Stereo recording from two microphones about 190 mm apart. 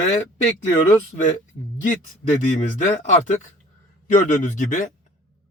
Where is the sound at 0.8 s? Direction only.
40° left (ahead or behind).